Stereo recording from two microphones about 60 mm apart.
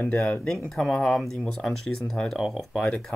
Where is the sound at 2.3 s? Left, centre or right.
Centre.